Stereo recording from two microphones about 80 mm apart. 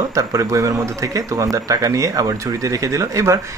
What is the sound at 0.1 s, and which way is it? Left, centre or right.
Speech, right.